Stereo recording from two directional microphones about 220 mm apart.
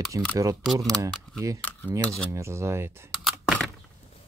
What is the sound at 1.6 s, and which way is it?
Cutlery, 5° left (ahead or behind).